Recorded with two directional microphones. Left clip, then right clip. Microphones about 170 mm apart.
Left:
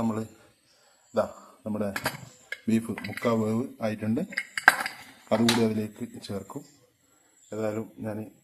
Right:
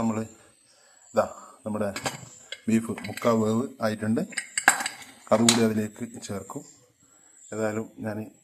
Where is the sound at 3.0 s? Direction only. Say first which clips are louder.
Right 4 dB; 10° right (ahead or behind).